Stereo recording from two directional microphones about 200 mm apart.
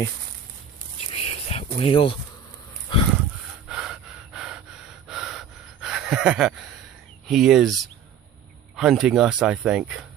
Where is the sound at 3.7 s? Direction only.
5° right (ahead or behind).